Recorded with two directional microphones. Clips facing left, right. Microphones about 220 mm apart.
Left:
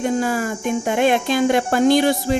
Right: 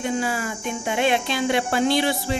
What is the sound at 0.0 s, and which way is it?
Speech, 45° left (ahead or behind).